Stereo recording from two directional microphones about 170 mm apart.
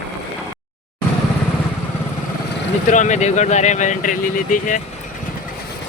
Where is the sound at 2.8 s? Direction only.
45° left (ahead or behind).